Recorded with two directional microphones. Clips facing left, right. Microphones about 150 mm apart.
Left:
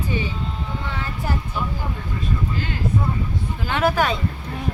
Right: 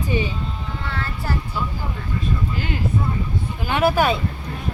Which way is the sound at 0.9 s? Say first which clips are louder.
Right 1 dB; 15° left (ahead or behind).